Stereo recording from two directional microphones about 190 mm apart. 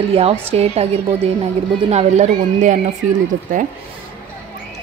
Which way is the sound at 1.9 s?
35° right (ahead or behind).